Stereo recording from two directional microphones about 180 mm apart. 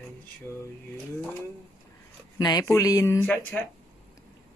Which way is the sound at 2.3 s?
20° left (ahead or behind).